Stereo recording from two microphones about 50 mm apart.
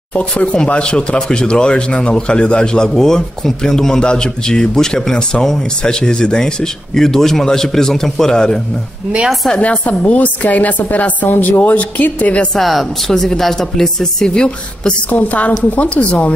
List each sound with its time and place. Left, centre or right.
0.2 s a man's voice: left
9.6 s a woman's voice: left
12.5 s a man's voice: centre
15.0 s a woman's voice: left